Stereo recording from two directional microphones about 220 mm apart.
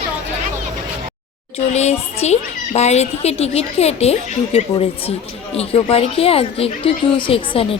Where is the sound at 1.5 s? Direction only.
30° left (ahead or behind).